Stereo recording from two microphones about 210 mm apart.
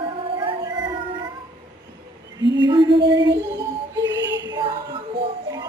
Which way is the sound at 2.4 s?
60° right (ahead or behind).